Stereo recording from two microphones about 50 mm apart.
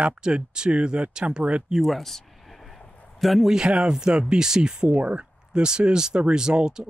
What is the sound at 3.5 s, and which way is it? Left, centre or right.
Speech, centre.